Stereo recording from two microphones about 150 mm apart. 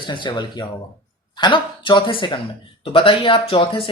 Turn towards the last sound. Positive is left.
turn(degrees=35)  # may be behind; listen again after turning